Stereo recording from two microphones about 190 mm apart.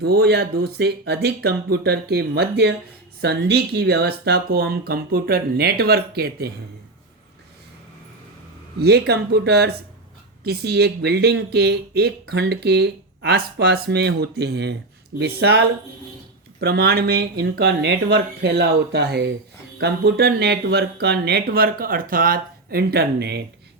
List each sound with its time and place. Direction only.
0.0 s speech: 60° right (ahead or behind)
8.8 s speech: 60° right (ahead or behind)